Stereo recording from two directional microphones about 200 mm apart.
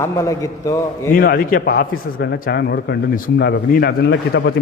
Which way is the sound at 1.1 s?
45° left (ahead or behind).